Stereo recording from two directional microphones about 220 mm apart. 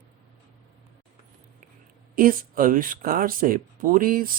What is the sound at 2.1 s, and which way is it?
Speech, 40° right (ahead or behind).